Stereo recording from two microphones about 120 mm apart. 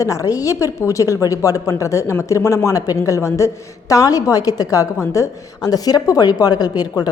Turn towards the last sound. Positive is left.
turn(degrees=35)  # may be behind; listen again after turning